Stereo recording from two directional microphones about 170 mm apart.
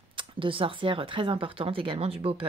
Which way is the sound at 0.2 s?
30° right (ahead or behind).